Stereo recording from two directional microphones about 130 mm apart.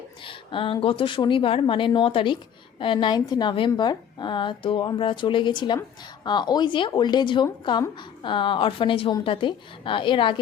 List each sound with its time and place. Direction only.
0.3 s a woman's voice: 40° left (ahead or behind)